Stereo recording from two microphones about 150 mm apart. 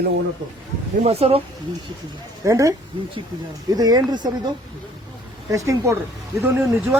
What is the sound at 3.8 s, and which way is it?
Speech, 25° right (ahead or behind).